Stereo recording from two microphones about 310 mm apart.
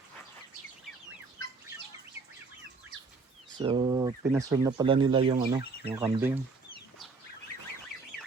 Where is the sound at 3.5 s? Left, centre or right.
Centre.